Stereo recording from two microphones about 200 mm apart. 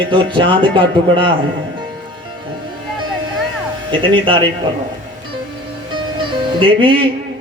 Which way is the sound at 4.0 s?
25° right (ahead or behind).